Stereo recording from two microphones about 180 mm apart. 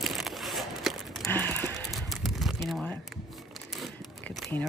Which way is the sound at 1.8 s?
Centre (ahead or behind).